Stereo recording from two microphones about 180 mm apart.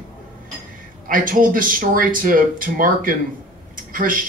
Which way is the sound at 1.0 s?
50° right (ahead or behind).